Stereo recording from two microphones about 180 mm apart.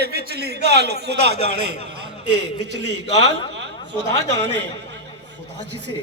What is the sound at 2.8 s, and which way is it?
Speech, 70° right (ahead or behind).